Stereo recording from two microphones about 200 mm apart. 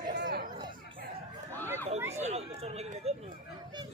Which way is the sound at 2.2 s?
30° right (ahead or behind).